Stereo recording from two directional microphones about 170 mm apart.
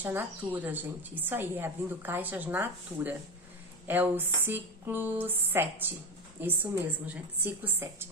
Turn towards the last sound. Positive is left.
turn(degrees=-10)  # may be behind; listen again after turning